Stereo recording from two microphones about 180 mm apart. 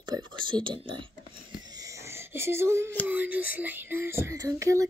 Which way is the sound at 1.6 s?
20° right (ahead or behind).